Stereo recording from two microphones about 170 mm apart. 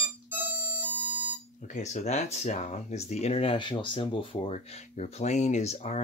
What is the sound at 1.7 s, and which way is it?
Speech, 45° left (ahead or behind).